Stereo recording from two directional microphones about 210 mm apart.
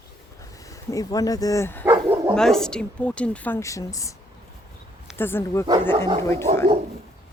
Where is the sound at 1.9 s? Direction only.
10° right (ahead or behind).